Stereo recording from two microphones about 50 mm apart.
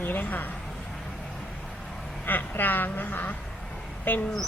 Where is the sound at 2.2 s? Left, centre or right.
Left.